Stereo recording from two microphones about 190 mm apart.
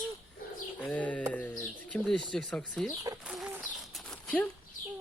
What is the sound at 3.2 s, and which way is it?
Bird, 5° right (ahead or behind).